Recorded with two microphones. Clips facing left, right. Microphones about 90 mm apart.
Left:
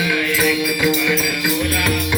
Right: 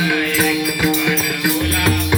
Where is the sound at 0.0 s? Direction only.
35° right (ahead or behind).